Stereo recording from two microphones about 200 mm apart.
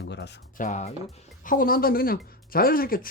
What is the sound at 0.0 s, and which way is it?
Music, 60° left (ahead or behind).